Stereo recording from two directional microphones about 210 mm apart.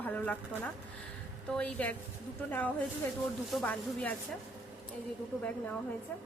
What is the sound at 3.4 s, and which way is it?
Speech, 5° left (ahead or behind).